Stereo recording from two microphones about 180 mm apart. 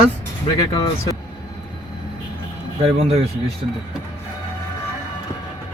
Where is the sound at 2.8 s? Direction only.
35° right (ahead or behind).